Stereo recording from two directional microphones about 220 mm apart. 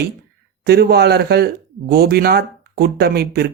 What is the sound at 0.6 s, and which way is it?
Speech, 45° right (ahead or behind).